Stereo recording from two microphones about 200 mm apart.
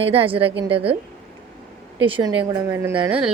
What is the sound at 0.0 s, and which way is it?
Speech, 30° right (ahead or behind).